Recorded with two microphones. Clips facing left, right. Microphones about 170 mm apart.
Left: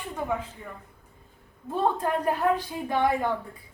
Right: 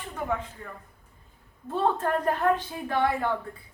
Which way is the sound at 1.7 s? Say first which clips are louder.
Even; 10° left (ahead or behind).